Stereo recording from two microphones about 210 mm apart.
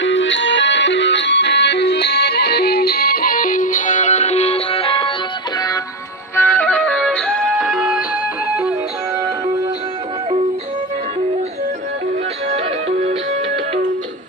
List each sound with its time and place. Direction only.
0.0 s music: 60° left (ahead or behind); by 5.1 s 25° left (ahead or behind)
6.3 s music: 10° left (ahead or behind)